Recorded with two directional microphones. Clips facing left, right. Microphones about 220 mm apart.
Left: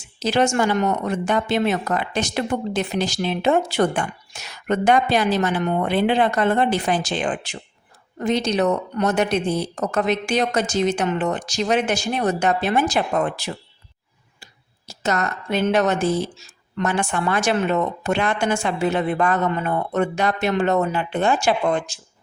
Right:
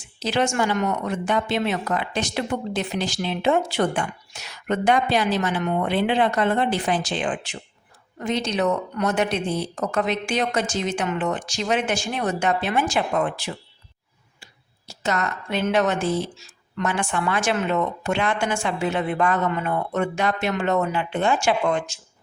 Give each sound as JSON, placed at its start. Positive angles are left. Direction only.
{"t": 0.2, "sound": "speech", "side_deg": 40}
{"t": 14.8, "sound": "speech", "side_deg": 40}